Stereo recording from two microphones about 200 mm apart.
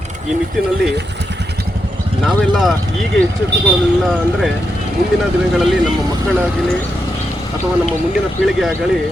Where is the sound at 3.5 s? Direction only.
60° right (ahead or behind).